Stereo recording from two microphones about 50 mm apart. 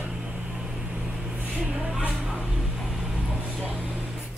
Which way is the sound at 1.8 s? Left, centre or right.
Centre.